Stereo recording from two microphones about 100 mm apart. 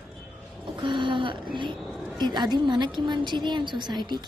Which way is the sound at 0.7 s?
55° right (ahead or behind).